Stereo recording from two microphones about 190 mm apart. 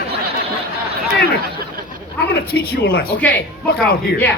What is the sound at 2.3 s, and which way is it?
Speech, 55° left (ahead or behind).